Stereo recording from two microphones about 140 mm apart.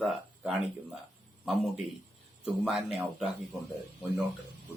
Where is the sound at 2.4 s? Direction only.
5° right (ahead or behind).